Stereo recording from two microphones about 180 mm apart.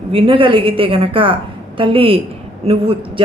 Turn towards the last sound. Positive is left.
turn(degrees=-30)  # may be behind; listen again after turning